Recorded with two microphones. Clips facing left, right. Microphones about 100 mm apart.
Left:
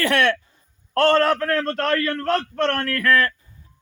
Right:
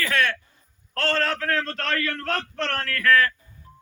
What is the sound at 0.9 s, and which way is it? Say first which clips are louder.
A man's voice: left 8 dB; 55° left (ahead or behind).